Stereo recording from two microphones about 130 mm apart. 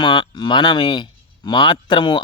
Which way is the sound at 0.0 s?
35° left (ahead or behind).